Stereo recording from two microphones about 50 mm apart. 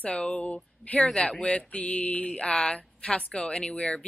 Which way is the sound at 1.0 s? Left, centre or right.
Centre.